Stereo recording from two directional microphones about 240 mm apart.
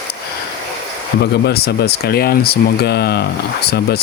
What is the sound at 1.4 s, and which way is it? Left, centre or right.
Speech, left.